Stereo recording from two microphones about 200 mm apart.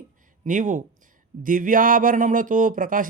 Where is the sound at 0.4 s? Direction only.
40° right (ahead or behind).